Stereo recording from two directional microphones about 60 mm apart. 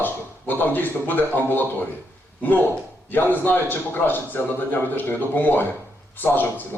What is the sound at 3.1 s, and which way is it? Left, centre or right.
A man's voice, left.